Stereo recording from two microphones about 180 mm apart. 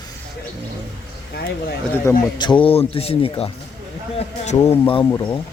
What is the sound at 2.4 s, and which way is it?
Speech, 30° left (ahead or behind).